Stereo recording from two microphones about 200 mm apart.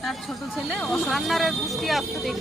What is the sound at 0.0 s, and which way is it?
Speech, centre (ahead or behind).